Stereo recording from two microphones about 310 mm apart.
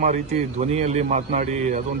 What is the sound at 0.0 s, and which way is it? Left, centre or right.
Speech, right.